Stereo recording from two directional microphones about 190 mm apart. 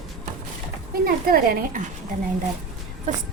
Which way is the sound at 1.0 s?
50° right (ahead or behind).